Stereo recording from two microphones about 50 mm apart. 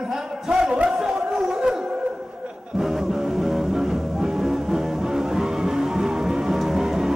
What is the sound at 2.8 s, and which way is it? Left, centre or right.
Music, centre.